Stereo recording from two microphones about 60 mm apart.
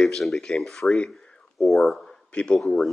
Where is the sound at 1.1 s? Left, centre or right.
Centre.